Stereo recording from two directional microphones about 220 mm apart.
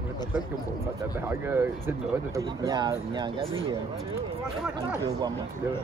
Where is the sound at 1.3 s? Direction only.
10° right (ahead or behind).